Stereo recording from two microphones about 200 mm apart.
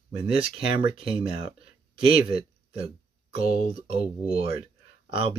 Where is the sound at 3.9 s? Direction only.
30° right (ahead or behind).